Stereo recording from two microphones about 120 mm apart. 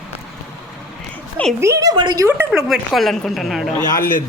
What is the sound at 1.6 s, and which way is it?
Speech, 25° right (ahead or behind).